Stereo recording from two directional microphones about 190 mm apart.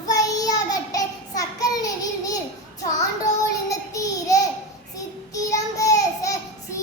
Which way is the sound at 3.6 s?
20° left (ahead or behind).